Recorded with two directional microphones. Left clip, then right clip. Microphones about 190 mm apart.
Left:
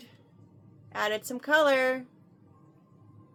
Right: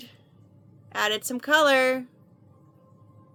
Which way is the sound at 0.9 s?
50° right (ahead or behind).